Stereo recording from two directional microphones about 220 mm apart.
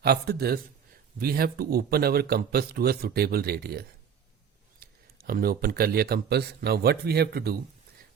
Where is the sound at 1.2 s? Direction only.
45° right (ahead or behind).